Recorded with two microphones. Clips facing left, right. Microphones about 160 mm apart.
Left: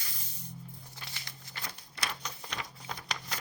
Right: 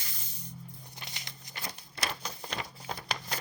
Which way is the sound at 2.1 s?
30° right (ahead or behind).